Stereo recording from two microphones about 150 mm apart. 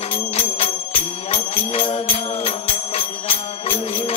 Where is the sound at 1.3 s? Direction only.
35° left (ahead or behind).